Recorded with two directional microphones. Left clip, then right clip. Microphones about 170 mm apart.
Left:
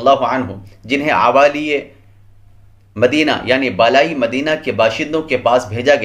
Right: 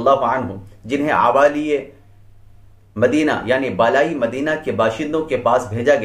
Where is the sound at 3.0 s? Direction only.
20° left (ahead or behind).